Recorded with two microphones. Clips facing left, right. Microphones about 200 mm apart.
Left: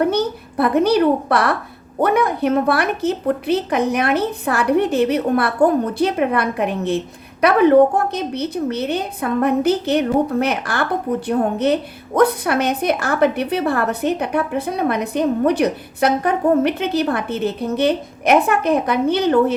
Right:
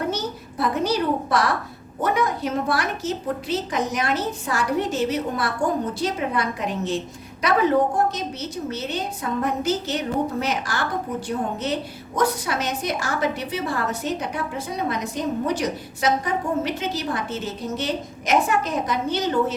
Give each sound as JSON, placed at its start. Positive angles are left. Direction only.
{"t": 0.1, "sound": "a woman's voice", "side_deg": 60}